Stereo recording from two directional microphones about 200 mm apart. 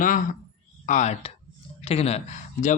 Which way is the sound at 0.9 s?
35° left (ahead or behind).